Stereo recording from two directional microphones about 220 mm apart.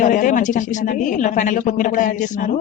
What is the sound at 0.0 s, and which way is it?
A woman's voice, 35° left (ahead or behind).